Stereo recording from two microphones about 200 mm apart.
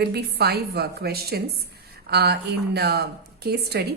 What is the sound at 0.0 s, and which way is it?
A woman's voice, 55° right (ahead or behind).